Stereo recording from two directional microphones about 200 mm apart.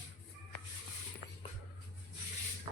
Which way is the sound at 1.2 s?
25° right (ahead or behind).